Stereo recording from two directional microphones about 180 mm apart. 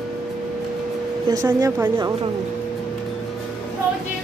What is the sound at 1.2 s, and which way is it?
Speech, 20° right (ahead or behind).